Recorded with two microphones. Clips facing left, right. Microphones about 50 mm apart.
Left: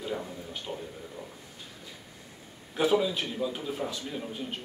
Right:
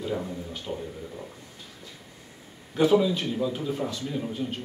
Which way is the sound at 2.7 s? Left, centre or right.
Centre.